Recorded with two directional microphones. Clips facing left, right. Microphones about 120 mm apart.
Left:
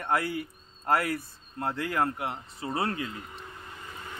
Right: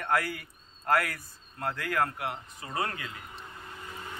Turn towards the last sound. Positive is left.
turn(degrees=30)  # may be behind; listen again after turning